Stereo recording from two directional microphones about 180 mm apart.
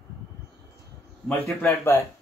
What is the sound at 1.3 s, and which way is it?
Speech, 15° left (ahead or behind).